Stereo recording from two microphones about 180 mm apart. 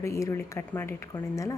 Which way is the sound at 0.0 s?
15° left (ahead or behind).